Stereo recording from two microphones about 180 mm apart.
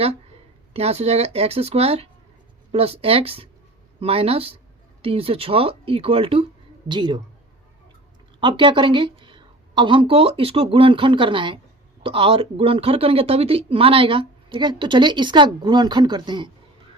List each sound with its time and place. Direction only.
0.7 s a woman's voice: 35° right (ahead or behind)
8.4 s a woman's voice: 25° right (ahead or behind)